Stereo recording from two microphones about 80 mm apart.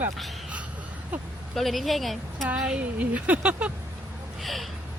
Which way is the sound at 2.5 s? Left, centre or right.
Centre.